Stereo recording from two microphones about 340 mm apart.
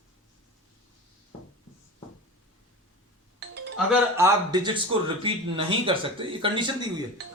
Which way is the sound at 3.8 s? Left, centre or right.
Centre.